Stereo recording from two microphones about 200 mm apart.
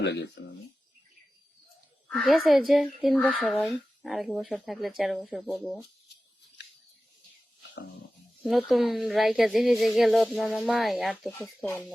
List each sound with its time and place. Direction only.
0.0 s speech: 60° left (ahead or behind)
2.0 s speech: centre (ahead or behind)
8.4 s speech: centre (ahead or behind)